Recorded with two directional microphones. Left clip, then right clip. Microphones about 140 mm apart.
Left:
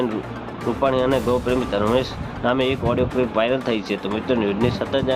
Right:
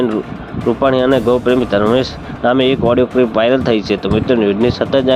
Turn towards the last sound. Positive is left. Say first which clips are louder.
# right 8 dB
turn(degrees=-45)  # may be behind; listen again after turning